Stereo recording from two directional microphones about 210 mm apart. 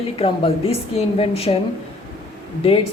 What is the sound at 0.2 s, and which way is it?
A woman's voice, 25° left (ahead or behind).